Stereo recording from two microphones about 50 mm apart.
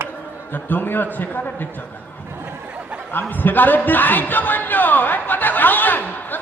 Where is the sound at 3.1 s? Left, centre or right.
Left.